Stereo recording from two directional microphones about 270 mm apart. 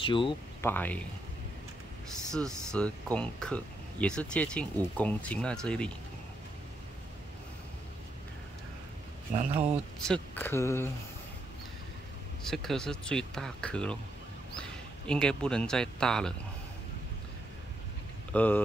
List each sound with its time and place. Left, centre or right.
0.0 s speech: centre
0.7 s speech: centre
2.3 s speech: centre
9.6 s speech: centre
12.4 s speech: centre
18.3 s speech: centre